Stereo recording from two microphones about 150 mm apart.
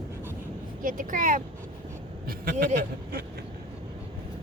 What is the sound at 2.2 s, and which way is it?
Speech, 75° right (ahead or behind).